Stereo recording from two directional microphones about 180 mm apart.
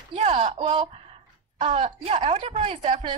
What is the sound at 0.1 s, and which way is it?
A woman's voice, 30° right (ahead or behind).